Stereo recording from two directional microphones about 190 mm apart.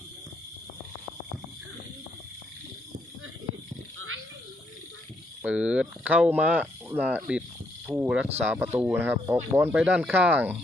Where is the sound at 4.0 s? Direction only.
90° right.